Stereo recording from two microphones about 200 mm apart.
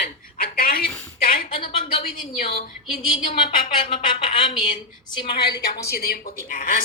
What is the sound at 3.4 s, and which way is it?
A woman's voice, 25° left (ahead or behind).